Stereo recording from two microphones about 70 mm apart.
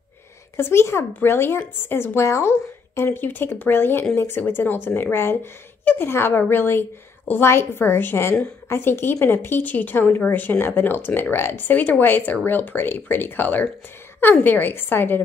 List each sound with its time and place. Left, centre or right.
0.6 s a woman's voice: left